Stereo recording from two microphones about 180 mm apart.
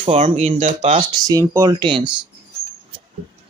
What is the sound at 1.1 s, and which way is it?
Speech, 20° right (ahead or behind).